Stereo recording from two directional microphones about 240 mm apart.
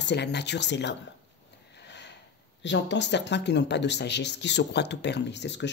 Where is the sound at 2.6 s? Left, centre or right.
Left.